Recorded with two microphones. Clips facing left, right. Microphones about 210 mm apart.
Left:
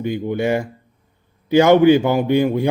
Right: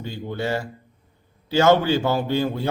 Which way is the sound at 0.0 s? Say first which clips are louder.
Left 8 dB; 15° left (ahead or behind).